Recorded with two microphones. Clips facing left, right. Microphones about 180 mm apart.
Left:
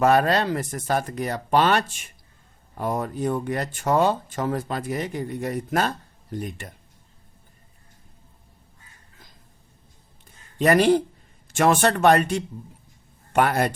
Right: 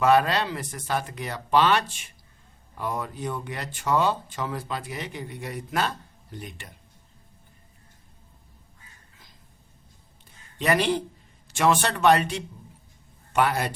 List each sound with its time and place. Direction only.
0.0 s speech: 45° left (ahead or behind)
10.6 s speech: 45° left (ahead or behind)